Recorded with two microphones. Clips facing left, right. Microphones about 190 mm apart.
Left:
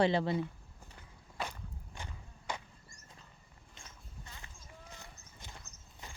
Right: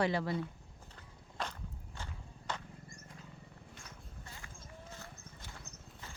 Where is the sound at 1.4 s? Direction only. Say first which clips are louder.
Left 1 dB; 5° left (ahead or behind).